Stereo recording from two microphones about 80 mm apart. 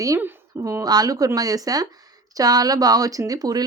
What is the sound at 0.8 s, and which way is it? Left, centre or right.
Speech, right.